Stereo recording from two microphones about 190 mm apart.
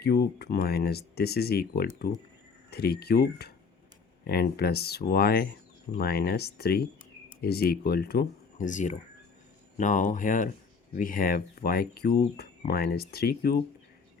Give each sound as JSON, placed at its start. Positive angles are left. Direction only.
{"t": 0.0, "sound": "speech", "side_deg": 55}